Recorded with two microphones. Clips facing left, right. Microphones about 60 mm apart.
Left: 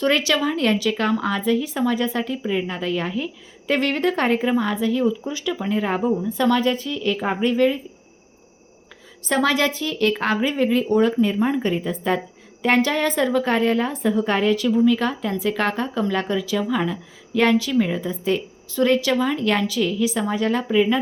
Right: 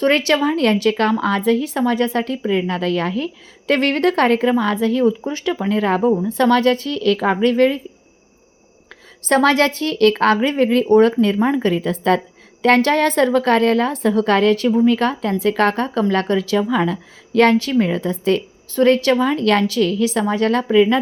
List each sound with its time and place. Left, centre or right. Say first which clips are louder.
0.0 s a woman's voice: right 4 dB; right
9.2 s a woman's voice: right 5 dB; right
12.6 s a woman's voice: right 5 dB; right
18.7 s a woman's voice: right 5 dB; right